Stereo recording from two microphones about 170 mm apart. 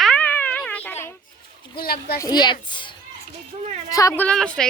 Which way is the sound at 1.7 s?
65° left (ahead or behind).